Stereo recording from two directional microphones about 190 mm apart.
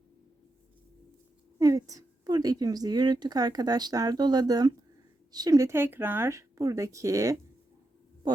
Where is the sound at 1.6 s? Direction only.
15° right (ahead or behind).